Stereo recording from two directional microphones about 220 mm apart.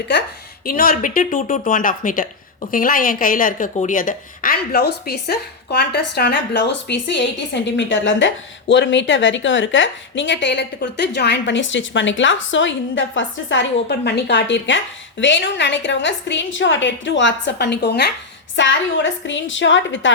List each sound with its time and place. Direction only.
0.6 s a woman's voice: 40° left (ahead or behind); by 20.1 s 60° left (ahead or behind)